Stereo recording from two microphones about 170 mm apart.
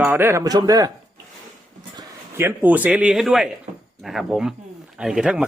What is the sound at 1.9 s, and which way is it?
Speech, 20° right (ahead or behind).